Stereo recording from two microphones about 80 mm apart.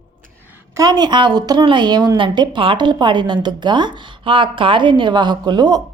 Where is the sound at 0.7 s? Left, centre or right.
Right.